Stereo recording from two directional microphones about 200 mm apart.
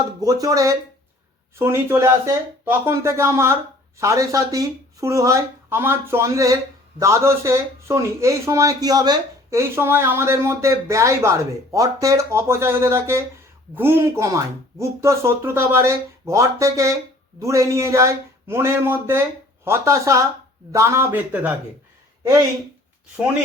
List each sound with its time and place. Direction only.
0.2 s speech: 20° right (ahead or behind)